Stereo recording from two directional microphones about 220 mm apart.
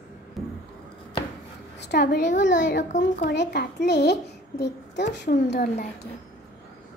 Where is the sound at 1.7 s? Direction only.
50° left (ahead or behind).